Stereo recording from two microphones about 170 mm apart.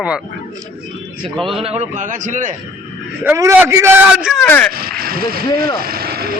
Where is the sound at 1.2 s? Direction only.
Centre (ahead or behind).